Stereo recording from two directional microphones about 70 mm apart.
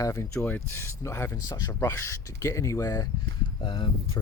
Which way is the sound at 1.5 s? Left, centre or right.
Left.